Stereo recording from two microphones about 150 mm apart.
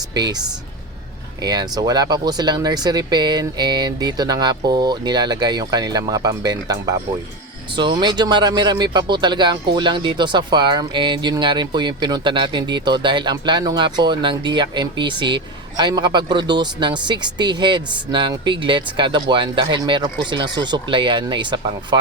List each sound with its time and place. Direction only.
0.1 s speech: 25° right (ahead or behind)